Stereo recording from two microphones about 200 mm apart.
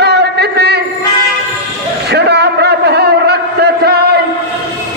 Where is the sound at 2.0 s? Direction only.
55° right (ahead or behind).